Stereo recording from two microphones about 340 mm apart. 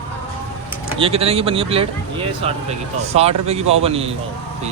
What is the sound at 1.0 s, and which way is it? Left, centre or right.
Speech, centre.